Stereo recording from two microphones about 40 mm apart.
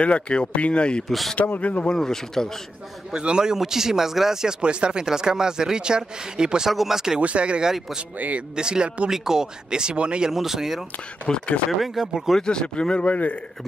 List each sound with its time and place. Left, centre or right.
0.0 s speech: left
1.0 s speech: centre
1.6 s speech: left
2.0 s speech: centre
3.1 s speech: right
4.6 s speech: right
5.0 s speech: centre
6.7 s speech: centre
7.2 s speech: right
7.6 s speech: centre
10.3 s speech: centre
11.3 s speech: left
11.7 s speech: centre
12.4 s speech: left